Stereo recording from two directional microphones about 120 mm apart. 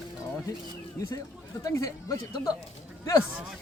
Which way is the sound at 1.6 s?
30° left (ahead or behind).